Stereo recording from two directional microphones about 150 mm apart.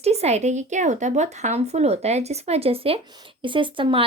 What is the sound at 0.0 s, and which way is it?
A woman's voice, 45° right (ahead or behind).